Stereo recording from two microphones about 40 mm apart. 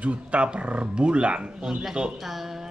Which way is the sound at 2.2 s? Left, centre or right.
Centre.